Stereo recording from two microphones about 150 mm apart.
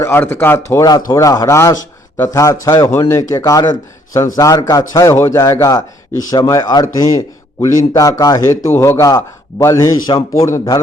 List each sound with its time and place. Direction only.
0.0 s speech: 15° left (ahead or behind)